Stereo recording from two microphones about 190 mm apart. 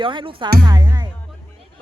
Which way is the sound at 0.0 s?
25° right (ahead or behind).